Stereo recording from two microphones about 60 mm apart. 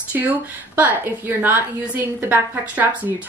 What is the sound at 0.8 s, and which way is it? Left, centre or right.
A woman's voice, right.